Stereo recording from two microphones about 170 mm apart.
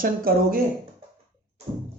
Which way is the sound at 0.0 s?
60° right (ahead or behind).